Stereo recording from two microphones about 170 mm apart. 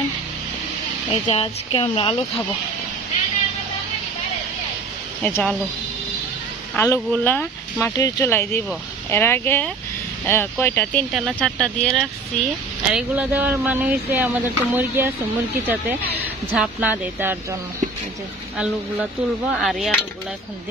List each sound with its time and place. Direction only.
1.2 s speech: 35° left (ahead or behind)
5.2 s speech: 10° left (ahead or behind)
6.8 s speech: 15° left (ahead or behind)
12.9 s speech: 10° right (ahead or behind)
19.6 s speech: centre (ahead or behind)